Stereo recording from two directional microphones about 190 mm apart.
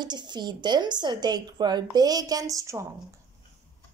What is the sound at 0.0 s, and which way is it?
A woman's voice, 25° right (ahead or behind).